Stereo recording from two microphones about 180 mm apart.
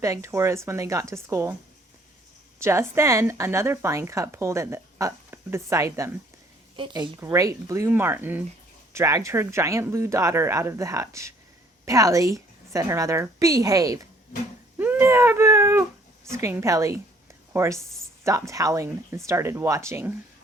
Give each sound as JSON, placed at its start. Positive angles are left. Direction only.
{"t": 0.0, "sound": "speech", "side_deg": -15}
{"t": 2.6, "sound": "speech", "side_deg": -15}
{"t": 6.7, "sound": "a woman's voice", "side_deg": -25}
{"t": 14.8, "sound": "cat", "side_deg": -10}
{"t": 16.3, "sound": "speech", "side_deg": -15}